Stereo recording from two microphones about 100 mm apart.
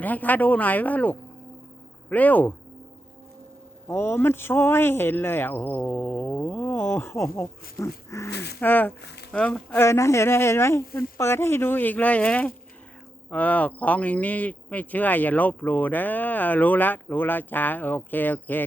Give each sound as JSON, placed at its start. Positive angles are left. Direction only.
{"t": 0.0, "sound": "speech", "side_deg": 15}
{"t": 3.8, "sound": "speech", "side_deg": 25}
{"t": 9.7, "sound": "speech", "side_deg": 25}